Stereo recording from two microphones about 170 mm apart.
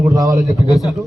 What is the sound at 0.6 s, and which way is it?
Speech, 20° left (ahead or behind).